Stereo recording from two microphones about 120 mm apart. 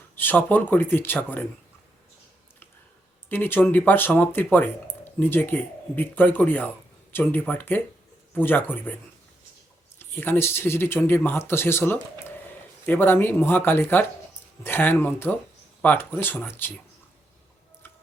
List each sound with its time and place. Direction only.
0.2 s speech: 15° left (ahead or behind)
3.2 s speech: 15° left (ahead or behind)
10.0 s speech: 20° left (ahead or behind)